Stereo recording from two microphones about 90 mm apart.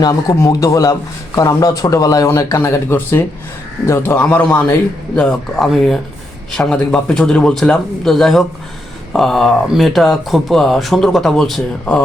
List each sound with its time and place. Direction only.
0.0 s a man's voice: 40° left (ahead or behind); by 4.6 s 20° left (ahead or behind)
5.1 s speech: 5° left (ahead or behind)